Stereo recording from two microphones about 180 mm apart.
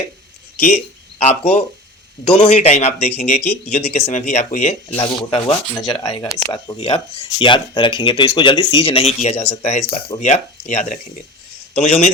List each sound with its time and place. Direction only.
1.2 s speech: 40° left (ahead or behind); by 6.7 s 20° left (ahead or behind)
6.7 s speech: 30° left (ahead or behind)